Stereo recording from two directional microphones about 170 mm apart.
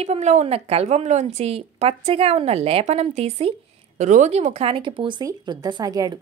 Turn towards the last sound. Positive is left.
turn(degrees=-20)  # may be behind; listen again after turning